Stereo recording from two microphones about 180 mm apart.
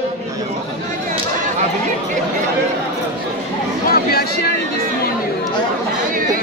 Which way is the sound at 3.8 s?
55° left (ahead or behind).